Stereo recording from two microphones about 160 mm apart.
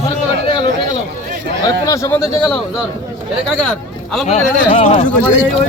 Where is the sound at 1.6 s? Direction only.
20° left (ahead or behind).